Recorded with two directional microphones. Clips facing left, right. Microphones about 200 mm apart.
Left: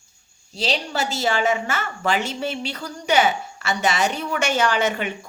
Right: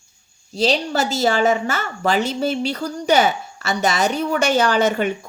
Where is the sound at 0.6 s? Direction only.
40° right (ahead or behind).